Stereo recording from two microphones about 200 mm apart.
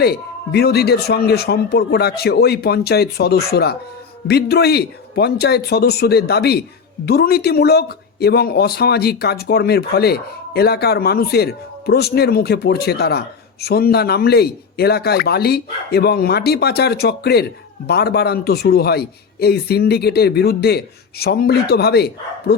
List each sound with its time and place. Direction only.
0.0 s speech: 55° left (ahead or behind)